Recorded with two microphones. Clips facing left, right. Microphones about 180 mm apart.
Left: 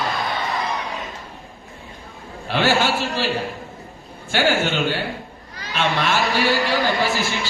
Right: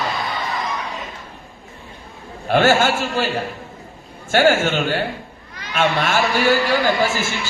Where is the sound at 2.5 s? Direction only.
45° right (ahead or behind).